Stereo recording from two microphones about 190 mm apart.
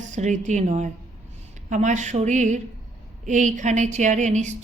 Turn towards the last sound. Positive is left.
turn(degrees=-40)  # may be behind; listen again after turning